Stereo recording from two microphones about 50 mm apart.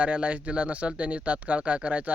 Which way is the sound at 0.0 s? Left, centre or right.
Right.